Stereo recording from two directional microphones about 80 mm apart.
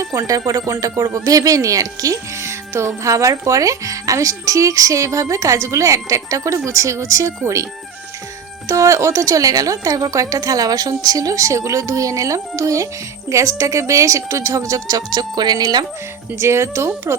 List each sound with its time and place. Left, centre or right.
0.0 s speech: right
16.4 s speech: right